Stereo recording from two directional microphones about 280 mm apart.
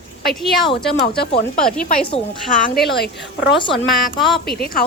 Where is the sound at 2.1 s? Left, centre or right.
Left.